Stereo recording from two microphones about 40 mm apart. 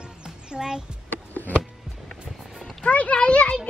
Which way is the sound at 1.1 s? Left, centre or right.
Left.